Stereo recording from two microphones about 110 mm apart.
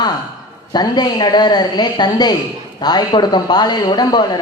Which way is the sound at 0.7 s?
40° left (ahead or behind).